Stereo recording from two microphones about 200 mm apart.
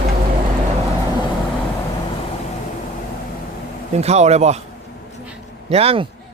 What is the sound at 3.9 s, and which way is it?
Speech, 35° right (ahead or behind).